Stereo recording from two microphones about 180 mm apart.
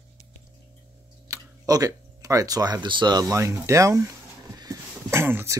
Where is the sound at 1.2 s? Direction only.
20° right (ahead or behind).